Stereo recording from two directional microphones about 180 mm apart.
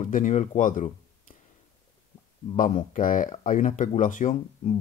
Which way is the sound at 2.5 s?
45° left (ahead or behind).